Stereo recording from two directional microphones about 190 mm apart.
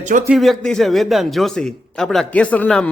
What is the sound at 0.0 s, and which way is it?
Speech, 45° right (ahead or behind).